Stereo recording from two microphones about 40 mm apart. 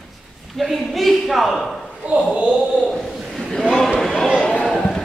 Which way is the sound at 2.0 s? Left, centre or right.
Right.